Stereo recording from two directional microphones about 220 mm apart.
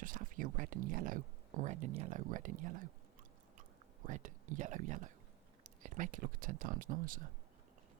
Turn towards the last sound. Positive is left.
turn(degrees=-40)  # may be behind; listen again after turning